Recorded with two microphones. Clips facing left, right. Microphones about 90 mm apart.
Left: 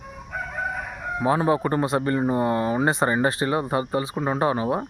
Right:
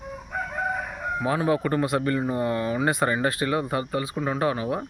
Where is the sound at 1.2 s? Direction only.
30° left (ahead or behind).